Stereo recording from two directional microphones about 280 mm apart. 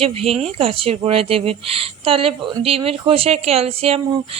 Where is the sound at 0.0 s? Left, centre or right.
Right.